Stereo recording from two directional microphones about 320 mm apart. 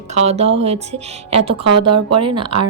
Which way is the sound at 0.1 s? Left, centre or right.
Centre.